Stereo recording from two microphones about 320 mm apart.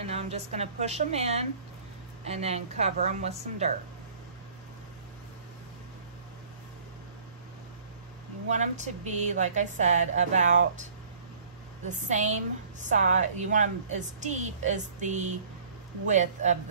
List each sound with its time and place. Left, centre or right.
0.0 s a woman's voice: centre
8.5 s a woman's voice: right
11.9 s a woman's voice: right